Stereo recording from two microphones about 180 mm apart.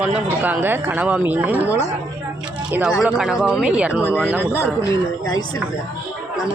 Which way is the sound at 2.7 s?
5° right (ahead or behind).